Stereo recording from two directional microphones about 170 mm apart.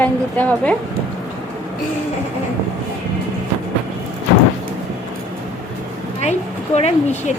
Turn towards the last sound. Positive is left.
turn(degrees=40)  # may be behind; listen again after turning